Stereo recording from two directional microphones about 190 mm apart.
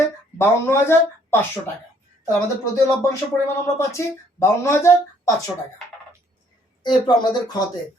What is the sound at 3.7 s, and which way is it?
Speech, 15° left (ahead or behind).